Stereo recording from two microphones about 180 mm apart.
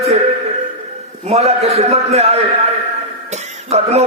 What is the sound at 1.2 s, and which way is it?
Speech, 35° right (ahead or behind).